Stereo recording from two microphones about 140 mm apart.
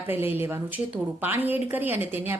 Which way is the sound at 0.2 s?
15° right (ahead or behind).